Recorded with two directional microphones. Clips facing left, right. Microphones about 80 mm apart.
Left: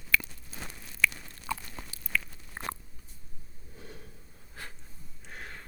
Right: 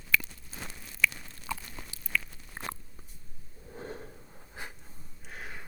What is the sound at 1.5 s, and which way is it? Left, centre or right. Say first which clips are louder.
Biting: left 2 dB; left.